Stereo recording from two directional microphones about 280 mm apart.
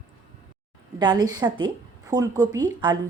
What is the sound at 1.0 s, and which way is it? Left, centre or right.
A woman's voice, centre.